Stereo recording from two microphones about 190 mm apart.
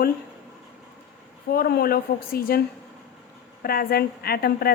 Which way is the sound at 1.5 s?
50° left (ahead or behind).